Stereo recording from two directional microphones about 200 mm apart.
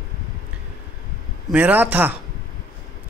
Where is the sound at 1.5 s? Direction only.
10° right (ahead or behind).